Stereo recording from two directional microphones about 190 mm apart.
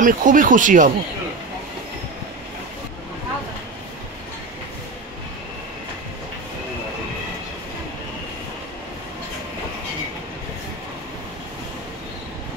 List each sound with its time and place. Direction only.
0.0 s speech: 45° right (ahead or behind)